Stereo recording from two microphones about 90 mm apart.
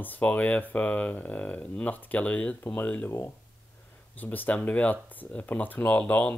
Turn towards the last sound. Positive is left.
turn(degrees=15)  # may be behind; listen again after turning